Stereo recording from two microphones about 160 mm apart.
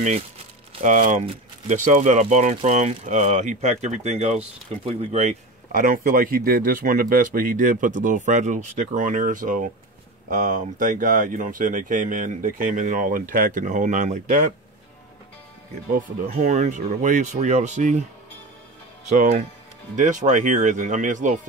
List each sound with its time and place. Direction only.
0.8 s speech: 50° right (ahead or behind)
5.1 s speech: 55° right (ahead or behind)
15.9 s speech: 60° right (ahead or behind)
19.0 s speech: 50° right (ahead or behind)